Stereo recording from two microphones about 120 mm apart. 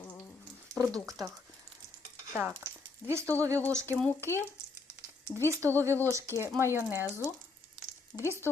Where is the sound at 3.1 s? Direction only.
25° right (ahead or behind).